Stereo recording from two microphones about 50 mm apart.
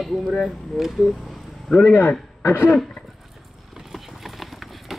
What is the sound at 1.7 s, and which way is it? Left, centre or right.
Speech, left.